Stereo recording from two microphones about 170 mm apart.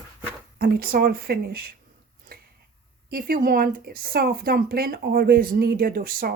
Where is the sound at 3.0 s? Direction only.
60° right (ahead or behind).